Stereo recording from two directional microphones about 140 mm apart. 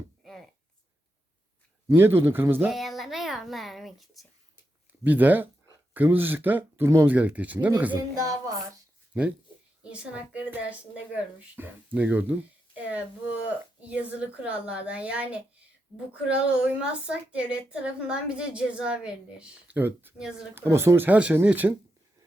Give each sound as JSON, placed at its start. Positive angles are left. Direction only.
{"t": 1.9, "sound": "a woman's voice", "side_deg": -15}
{"t": 2.6, "sound": "a child's voice", "side_deg": 0}
{"t": 4.9, "sound": "a woman's voice", "side_deg": -10}
{"t": 7.9, "sound": "speech", "side_deg": -25}
{"t": 9.9, "sound": "a woman's voice", "side_deg": -10}